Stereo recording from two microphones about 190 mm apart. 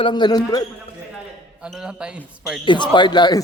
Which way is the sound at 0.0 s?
25° left (ahead or behind).